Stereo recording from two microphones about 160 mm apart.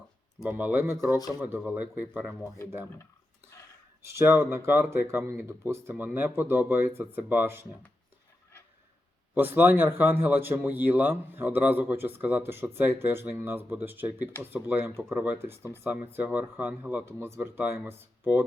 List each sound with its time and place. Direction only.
0.4 s speech: 10° right (ahead or behind)
4.1 s speech: 15° right (ahead or behind)
9.3 s speech: 15° right (ahead or behind)